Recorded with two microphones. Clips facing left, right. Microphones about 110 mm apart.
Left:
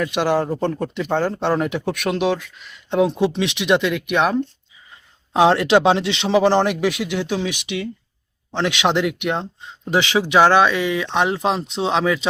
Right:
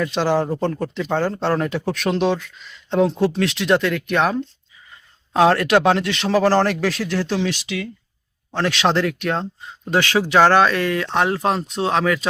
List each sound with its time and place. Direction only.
0.1 s speech: 10° left (ahead or behind)
11.9 s speech: 10° left (ahead or behind)